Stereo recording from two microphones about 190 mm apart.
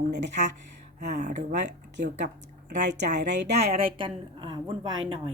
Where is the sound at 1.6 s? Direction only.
65° right (ahead or behind).